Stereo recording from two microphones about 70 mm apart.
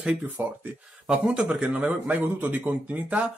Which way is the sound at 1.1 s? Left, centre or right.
Centre.